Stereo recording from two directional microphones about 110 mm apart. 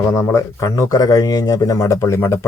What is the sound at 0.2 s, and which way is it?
Speech, 25° left (ahead or behind).